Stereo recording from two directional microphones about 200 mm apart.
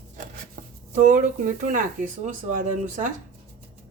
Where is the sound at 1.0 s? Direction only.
40° right (ahead or behind).